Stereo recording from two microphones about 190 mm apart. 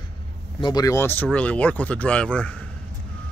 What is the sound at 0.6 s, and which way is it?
Speech, 20° left (ahead or behind).